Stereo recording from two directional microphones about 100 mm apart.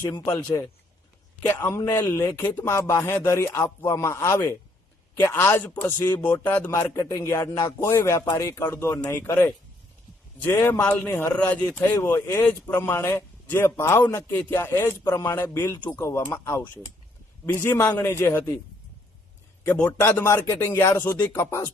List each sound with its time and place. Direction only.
0.3 s speech: 25° left (ahead or behind)
1.8 s speech: 35° left (ahead or behind)
19.8 s speech: 25° left (ahead or behind)